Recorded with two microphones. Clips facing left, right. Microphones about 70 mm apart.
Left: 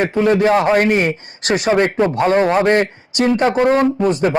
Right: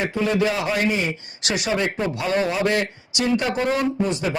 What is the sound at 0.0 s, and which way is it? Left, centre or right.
A man's voice, left.